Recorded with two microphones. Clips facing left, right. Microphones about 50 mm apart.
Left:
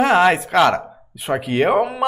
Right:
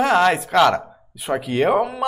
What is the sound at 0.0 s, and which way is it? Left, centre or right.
Speech, centre.